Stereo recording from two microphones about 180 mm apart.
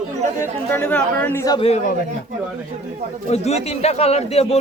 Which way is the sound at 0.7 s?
10° left (ahead or behind).